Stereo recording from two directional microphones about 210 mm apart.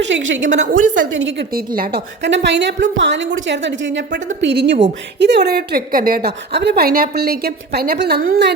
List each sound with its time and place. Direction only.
0.4 s a woman's voice: 35° right (ahead or behind)
1.2 s a woman's voice: 50° right (ahead or behind)